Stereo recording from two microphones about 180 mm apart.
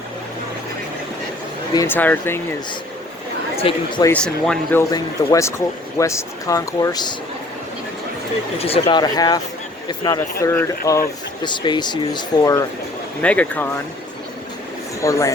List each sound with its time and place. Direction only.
1.7 s speech: 15° left (ahead or behind)
3.6 s speech: 30° left (ahead or behind)
4.0 s speech: 5° left (ahead or behind)
4.8 s speech: 20° left (ahead or behind)
8.5 s speech: 30° left (ahead or behind)
10.4 s speech: 15° left (ahead or behind)
11.4 s speech: 25° left (ahead or behind)
13.2 s speech: 10° left (ahead or behind)
15.0 s speech: 15° left (ahead or behind)